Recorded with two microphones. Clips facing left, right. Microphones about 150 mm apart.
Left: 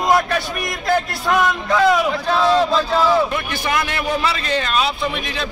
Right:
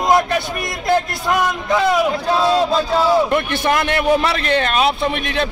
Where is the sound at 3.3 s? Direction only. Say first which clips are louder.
Right 5 dB; 60° right (ahead or behind).